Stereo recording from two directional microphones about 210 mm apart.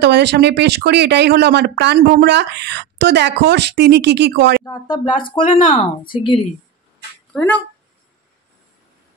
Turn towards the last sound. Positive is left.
turn(degrees=5)  # may be behind; listen again after turning